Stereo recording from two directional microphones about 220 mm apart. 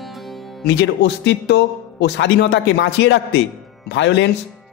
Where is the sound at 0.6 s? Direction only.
50° left (ahead or behind).